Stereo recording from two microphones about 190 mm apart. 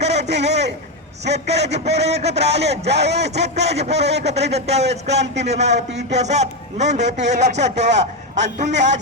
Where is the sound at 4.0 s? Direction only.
65° right (ahead or behind).